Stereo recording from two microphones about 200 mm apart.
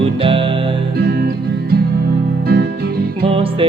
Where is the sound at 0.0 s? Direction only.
25° right (ahead or behind).